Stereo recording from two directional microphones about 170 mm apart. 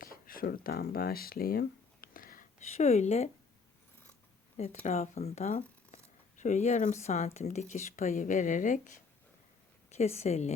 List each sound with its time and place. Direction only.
0.0 s a sound: 55° left (ahead or behind)
2.6 s a woman's voice: 40° left (ahead or behind)
4.5 s a woman's voice: 40° left (ahead or behind)